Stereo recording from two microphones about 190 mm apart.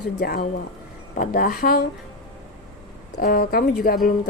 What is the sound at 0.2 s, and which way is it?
Speech, 50° left (ahead or behind).